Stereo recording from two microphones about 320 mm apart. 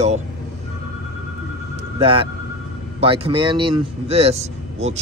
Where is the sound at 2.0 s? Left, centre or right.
Centre.